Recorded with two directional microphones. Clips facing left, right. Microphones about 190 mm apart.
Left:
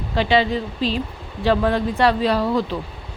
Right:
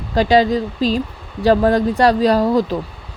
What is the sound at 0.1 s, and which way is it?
Speech, 40° right (ahead or behind).